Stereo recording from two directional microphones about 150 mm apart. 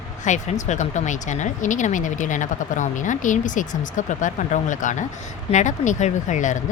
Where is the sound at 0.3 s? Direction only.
55° left (ahead or behind).